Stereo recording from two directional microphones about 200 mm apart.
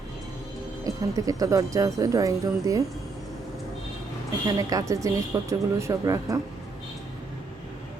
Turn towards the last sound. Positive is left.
turn(degrees=-15)  # may be behind; listen again after turning